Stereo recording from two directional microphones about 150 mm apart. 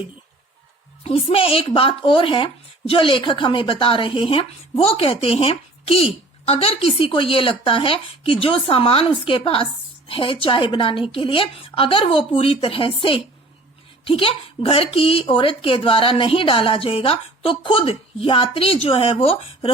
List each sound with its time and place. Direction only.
1.0 s a woman's voice: 35° left (ahead or behind)